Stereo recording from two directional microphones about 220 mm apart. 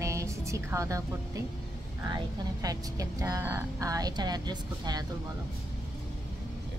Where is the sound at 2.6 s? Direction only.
15° right (ahead or behind).